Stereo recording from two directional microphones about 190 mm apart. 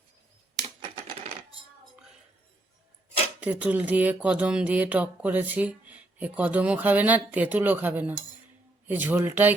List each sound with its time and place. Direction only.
3.4 s speech: 5° right (ahead or behind)